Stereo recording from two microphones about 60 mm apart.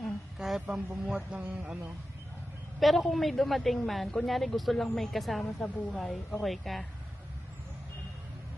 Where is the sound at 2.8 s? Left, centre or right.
Centre.